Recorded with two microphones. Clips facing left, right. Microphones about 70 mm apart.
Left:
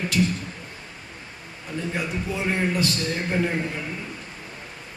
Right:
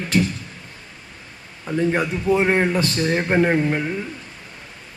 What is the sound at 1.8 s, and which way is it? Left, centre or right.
A man's voice, right.